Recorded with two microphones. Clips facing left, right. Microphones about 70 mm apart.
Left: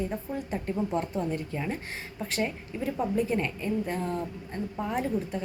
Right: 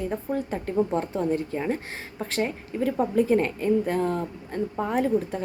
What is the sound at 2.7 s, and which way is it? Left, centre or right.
A woman's voice, right.